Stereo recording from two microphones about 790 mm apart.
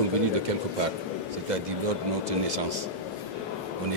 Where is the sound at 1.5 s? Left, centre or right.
Right.